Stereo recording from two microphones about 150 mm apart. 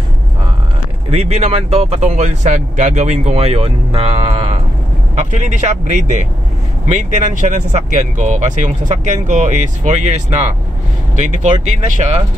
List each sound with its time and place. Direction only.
1.1 s speech: 45° right (ahead or behind)